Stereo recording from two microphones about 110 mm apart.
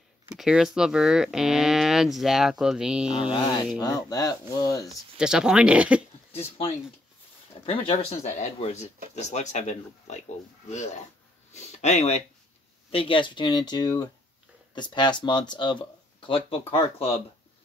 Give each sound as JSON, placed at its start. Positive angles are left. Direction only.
{"t": 0.3, "sound": "speech", "side_deg": -5}
{"t": 3.3, "sound": "speech", "side_deg": 45}
{"t": 3.8, "sound": "speech", "side_deg": 35}
{"t": 5.1, "sound": "speech", "side_deg": -5}
{"t": 7.6, "sound": "speech", "side_deg": 65}
{"t": 9.2, "sound": "speech", "side_deg": 90}
{"t": 12.9, "sound": "speech", "side_deg": 55}